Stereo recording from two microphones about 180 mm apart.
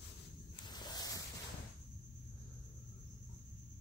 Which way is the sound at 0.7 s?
20° left (ahead or behind).